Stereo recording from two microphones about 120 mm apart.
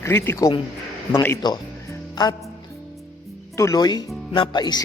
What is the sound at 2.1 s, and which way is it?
Music, 30° left (ahead or behind).